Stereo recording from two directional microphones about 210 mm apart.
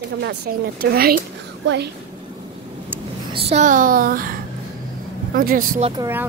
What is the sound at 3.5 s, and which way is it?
A child's voice, 35° right (ahead or behind).